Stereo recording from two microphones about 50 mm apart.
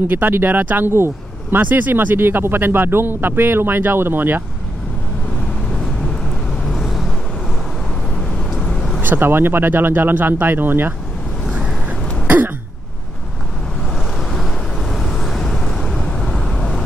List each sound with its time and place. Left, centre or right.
0.1 s speech: right
1.6 s speech: right
5.7 s vehicle: centre
6.7 s vehicle: centre
8.5 s vehicle: centre
9.0 s speech: right
14.3 s vehicle: centre